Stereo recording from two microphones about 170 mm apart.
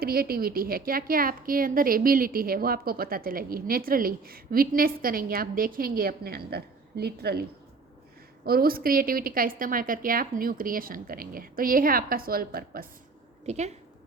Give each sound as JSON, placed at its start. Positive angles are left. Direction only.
{"t": 0.0, "sound": "a woman's voice", "side_deg": -60}
{"t": 8.4, "sound": "a woman's voice", "side_deg": -60}
{"t": 13.4, "sound": "a woman's voice", "side_deg": -40}